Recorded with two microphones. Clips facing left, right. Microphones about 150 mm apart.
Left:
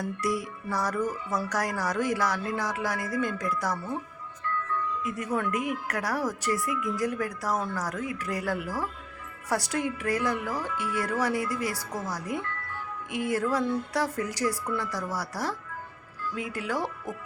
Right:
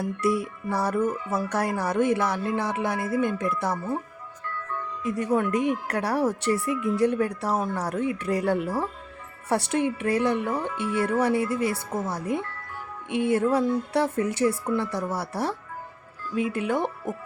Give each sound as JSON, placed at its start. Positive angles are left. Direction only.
{"t": 0.0, "sound": "speech", "side_deg": -25}
{"t": 5.0, "sound": "speech", "side_deg": -30}